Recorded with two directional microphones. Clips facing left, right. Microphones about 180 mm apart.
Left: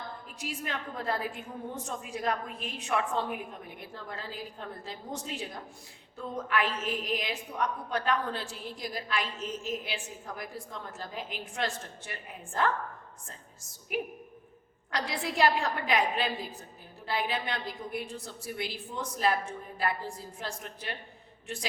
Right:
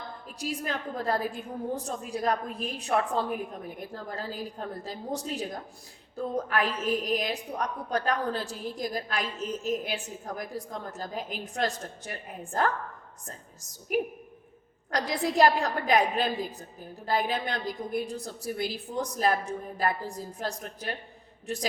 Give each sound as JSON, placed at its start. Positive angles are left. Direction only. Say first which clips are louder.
{"t": 0.3, "sound": "a woman's voice", "louder": "right 5 dB", "side_deg": -35}